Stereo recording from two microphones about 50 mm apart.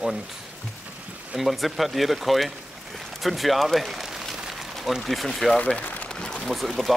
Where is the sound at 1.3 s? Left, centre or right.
Centre.